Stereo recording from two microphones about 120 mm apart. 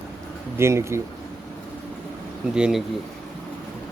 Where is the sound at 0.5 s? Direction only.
20° right (ahead or behind).